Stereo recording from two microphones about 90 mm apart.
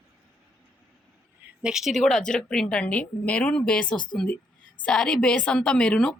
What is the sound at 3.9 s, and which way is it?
Speech, 55° left (ahead or behind).